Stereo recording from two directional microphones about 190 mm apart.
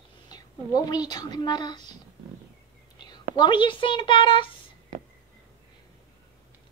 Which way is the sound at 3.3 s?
25° left (ahead or behind).